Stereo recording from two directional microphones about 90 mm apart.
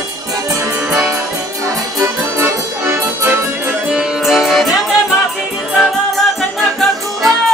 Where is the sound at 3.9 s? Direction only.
5° right (ahead or behind).